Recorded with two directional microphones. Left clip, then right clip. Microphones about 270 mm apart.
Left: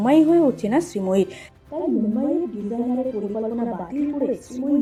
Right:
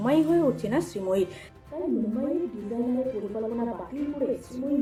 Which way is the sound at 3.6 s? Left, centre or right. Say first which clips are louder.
Left 5 dB; left.